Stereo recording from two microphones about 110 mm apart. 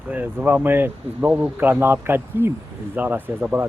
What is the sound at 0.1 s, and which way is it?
Speech, 15° right (ahead or behind).